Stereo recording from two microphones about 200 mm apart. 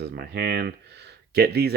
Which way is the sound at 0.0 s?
55° right (ahead or behind).